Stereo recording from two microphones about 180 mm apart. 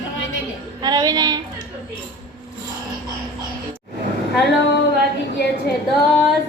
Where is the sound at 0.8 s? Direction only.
20° right (ahead or behind).